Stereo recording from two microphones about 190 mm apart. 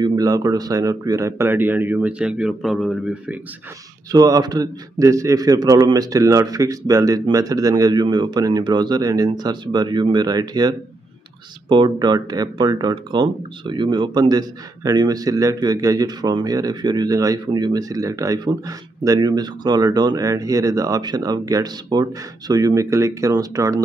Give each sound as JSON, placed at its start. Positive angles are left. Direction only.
{"t": 0.0, "sound": "speech", "side_deg": -20}
{"t": 4.1, "sound": "speech", "side_deg": -20}